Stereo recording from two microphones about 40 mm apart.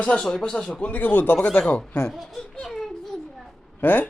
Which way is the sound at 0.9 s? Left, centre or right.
Left.